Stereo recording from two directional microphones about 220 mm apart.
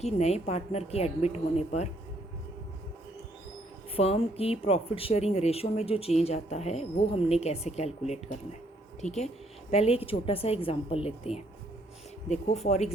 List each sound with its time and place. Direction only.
0.0 s speech: 30° left (ahead or behind)
3.9 s speech: 25° left (ahead or behind)